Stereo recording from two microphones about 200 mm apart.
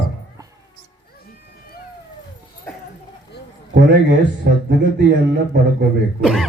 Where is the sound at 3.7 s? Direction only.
60° right (ahead or behind).